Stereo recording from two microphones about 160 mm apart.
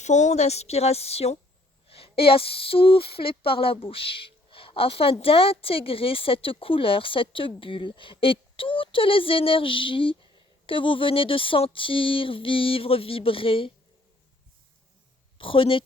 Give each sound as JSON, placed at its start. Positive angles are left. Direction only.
{"t": 0.0, "sound": "speech", "side_deg": 50}
{"t": 15.4, "sound": "speech", "side_deg": 35}